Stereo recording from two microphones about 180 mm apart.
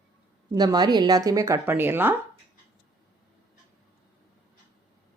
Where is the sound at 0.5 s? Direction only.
20° right (ahead or behind).